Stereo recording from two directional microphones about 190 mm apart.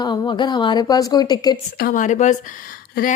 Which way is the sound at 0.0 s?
20° left (ahead or behind).